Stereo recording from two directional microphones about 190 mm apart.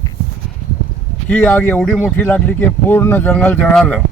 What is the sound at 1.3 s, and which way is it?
Speech, 10° left (ahead or behind).